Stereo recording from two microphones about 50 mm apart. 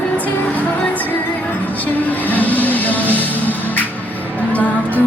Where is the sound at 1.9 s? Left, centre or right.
Left.